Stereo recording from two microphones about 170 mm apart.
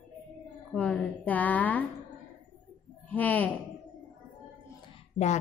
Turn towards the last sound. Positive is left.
turn(degrees=40)  # may be behind; listen again after turning